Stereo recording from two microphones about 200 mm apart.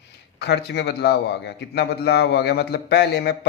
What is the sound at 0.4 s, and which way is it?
A man's voice, 55° left (ahead or behind).